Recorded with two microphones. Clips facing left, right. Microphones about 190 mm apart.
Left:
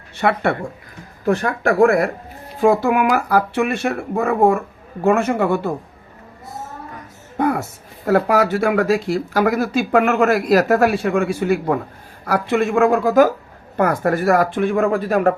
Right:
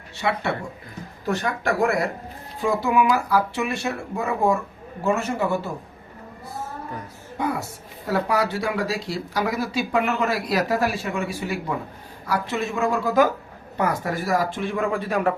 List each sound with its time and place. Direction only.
0.2 s speech: 55° left (ahead or behind)
7.3 s a sound: 55° left (ahead or behind)
8.0 s speech: 55° left (ahead or behind)
12.6 s speech: 70° left (ahead or behind); by 15.4 s 45° left (ahead or behind)